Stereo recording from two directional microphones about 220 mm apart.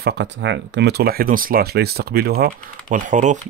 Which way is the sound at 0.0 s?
50° right (ahead or behind).